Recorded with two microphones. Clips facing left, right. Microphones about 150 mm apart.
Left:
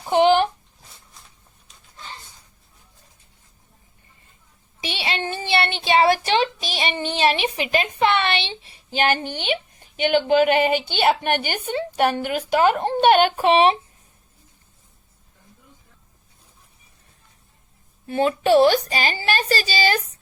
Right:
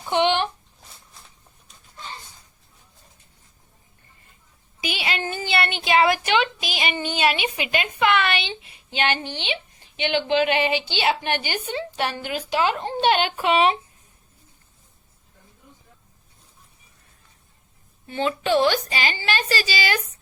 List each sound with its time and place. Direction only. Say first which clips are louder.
0.1 s a sound: left 5 dB; 40° left (ahead or behind)
4.8 s a child's voice: left 1 dB; 30° left (ahead or behind)
18.1 s a woman's voice: left 5 dB; 40° left (ahead or behind)